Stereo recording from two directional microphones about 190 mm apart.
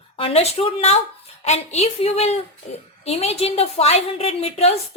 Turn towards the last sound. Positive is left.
turn(degrees=30)  # may be behind; listen again after turning